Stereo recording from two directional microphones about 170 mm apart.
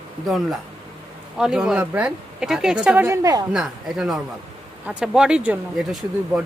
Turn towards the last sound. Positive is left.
turn(degrees=0)  # may be behind; listen again after turning